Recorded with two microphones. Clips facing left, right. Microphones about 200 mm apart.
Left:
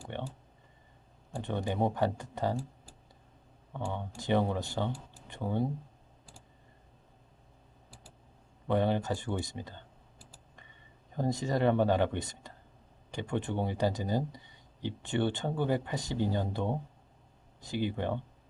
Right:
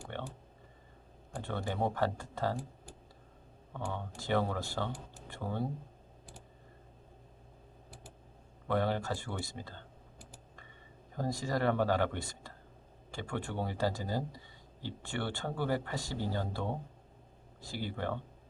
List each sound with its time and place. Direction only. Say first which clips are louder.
0.1 s a sound: left 3 dB; 20° left (ahead or behind)
1.3 s speech: left 4 dB; 20° left (ahead or behind)
3.8 s speech: left 2 dB; 20° left (ahead or behind)
8.6 s speech: left 3 dB; 20° left (ahead or behind)
11.2 s speech: left 4 dB; 20° left (ahead or behind)